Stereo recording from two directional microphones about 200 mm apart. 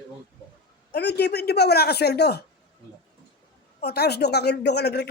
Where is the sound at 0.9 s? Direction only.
55° left (ahead or behind).